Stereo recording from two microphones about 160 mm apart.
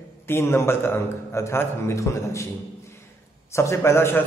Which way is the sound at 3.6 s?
15° left (ahead or behind).